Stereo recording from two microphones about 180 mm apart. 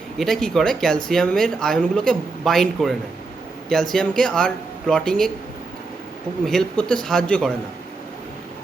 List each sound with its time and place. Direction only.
0.2 s speech: 5° left (ahead or behind)
6.4 s speech: 5° left (ahead or behind)